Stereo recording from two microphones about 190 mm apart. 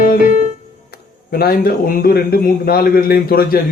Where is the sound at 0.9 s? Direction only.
50° left (ahead or behind).